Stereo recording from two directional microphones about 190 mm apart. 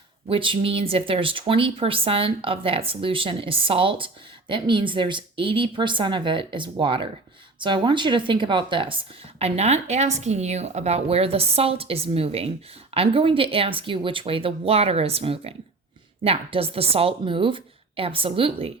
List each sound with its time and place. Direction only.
0.3 s speech: 25° right (ahead or behind)